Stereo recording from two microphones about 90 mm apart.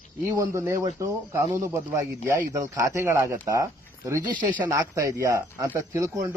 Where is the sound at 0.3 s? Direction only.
35° right (ahead or behind).